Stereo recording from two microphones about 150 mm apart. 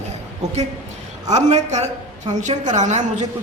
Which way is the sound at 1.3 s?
50° right (ahead or behind).